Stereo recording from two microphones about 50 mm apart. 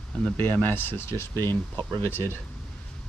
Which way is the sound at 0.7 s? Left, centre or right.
Left.